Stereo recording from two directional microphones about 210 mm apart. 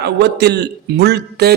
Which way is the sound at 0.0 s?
50° right (ahead or behind).